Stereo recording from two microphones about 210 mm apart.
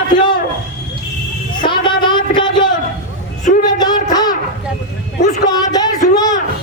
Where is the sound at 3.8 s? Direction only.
20° left (ahead or behind).